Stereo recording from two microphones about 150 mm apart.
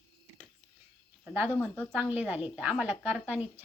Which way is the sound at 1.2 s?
10° right (ahead or behind).